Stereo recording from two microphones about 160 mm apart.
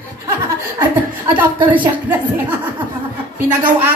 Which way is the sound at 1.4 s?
10° right (ahead or behind).